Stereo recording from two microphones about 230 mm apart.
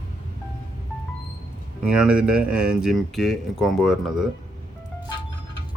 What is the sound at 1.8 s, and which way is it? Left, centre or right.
Speech, centre.